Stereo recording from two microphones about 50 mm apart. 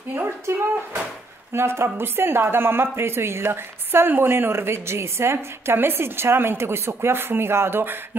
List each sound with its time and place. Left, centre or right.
0.5 s speech: right
1.5 s a woman's voice: right